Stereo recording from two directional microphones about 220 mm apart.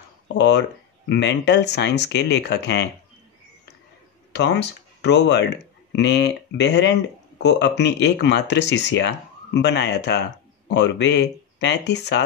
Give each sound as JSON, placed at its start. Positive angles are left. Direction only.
{"t": 0.4, "sound": "speech", "side_deg": 50}
{"t": 4.3, "sound": "speech", "side_deg": 50}